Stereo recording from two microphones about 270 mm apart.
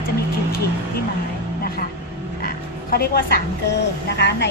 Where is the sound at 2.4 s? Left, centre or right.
Left.